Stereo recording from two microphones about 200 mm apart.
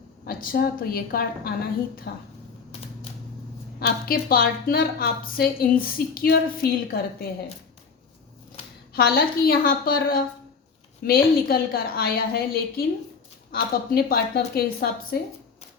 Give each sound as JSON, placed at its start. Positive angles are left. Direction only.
{"t": 0.3, "sound": "a woman's voice", "side_deg": 45}
{"t": 3.8, "sound": "a woman's voice", "side_deg": 50}
{"t": 8.9, "sound": "a woman's voice", "side_deg": 50}